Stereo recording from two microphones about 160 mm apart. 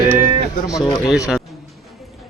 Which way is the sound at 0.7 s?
20° left (ahead or behind).